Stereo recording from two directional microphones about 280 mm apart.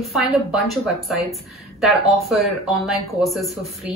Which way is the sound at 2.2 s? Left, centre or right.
Centre.